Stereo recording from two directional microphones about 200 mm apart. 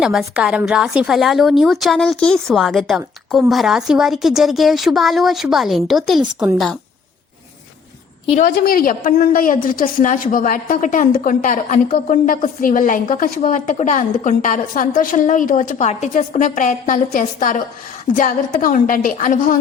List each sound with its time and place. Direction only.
0.0 s a woman's voice: centre (ahead or behind)
8.3 s a woman's voice: 45° left (ahead or behind)